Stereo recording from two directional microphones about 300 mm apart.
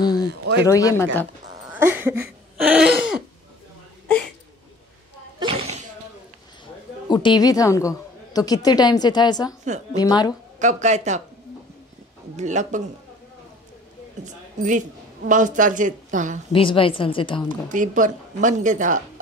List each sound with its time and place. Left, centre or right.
0.7 s a woman's voice: centre
1.6 s a sound: centre
5.4 s a sound: centre
7.1 s a woman's voice: centre
10.6 s speech: right
12.4 s speech: right
14.2 s a woman's voice: right
16.5 s a woman's voice: centre
17.6 s speech: right